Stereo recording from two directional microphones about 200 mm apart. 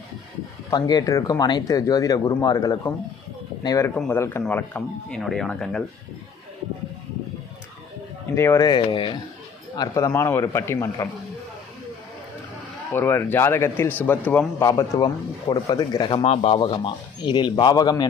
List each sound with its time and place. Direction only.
0.7 s speech: 20° left (ahead or behind); by 5.8 s centre (ahead or behind)
8.4 s speech: 15° left (ahead or behind)
12.9 s speech: 10° left (ahead or behind)